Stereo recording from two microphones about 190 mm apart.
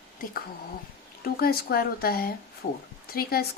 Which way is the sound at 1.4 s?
55° left (ahead or behind).